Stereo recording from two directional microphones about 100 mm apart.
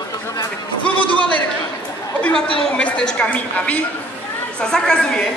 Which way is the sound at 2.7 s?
10° left (ahead or behind).